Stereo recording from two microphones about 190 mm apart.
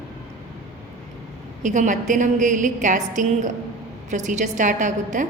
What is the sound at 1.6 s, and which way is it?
A woman's voice, 40° right (ahead or behind).